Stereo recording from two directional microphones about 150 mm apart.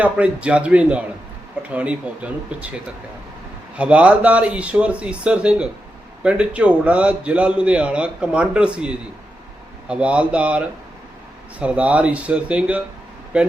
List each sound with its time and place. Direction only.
0.0 s a man's voice: 10° right (ahead or behind)
3.8 s a man's voice: 10° right (ahead or behind)
11.6 s a man's voice: 10° right (ahead or behind)